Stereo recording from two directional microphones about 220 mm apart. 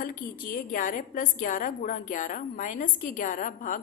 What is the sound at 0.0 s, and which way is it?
A woman's voice, 40° left (ahead or behind).